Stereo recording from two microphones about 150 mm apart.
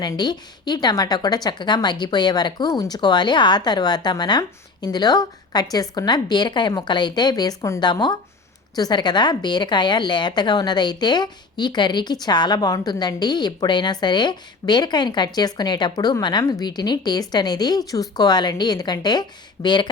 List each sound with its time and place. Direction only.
0.0 s speech: 30° left (ahead or behind)